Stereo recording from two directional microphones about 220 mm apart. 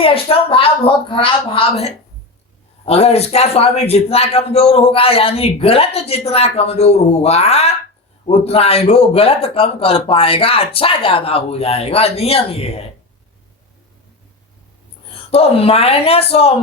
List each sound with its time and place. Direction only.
0.0 s a man's voice: 25° left (ahead or behind)
15.1 s a man's voice: 25° left (ahead or behind)